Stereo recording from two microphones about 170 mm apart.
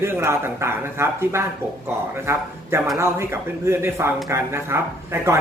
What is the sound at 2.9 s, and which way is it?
Speech, 15° right (ahead or behind).